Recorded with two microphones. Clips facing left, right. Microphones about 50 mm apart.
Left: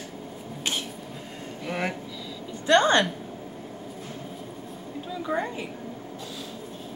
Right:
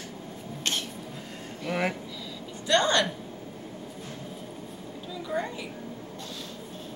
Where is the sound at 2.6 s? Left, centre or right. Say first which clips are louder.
Left 4 dB; left.